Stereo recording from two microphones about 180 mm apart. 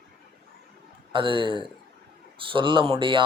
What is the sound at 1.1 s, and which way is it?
Speech, 25° right (ahead or behind).